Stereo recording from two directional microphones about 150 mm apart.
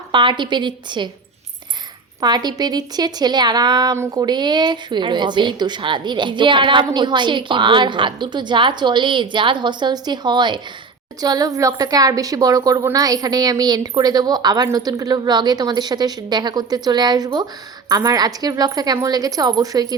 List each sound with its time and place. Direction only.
0.1 s a woman's voice: 30° right (ahead or behind)
2.2 s a woman's voice: 30° right (ahead or behind)